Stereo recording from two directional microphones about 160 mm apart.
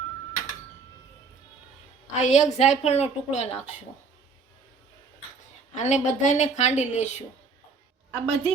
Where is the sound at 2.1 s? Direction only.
45° left (ahead or behind).